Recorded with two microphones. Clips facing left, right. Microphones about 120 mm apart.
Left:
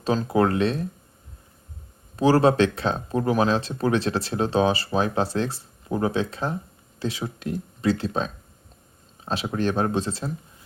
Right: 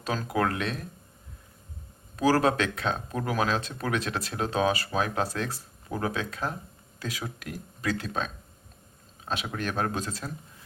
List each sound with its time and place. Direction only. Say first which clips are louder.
0.0 s speech: left 7 dB; 30° left (ahead or behind)
2.1 s speech: left 5 dB; 25° left (ahead or behind)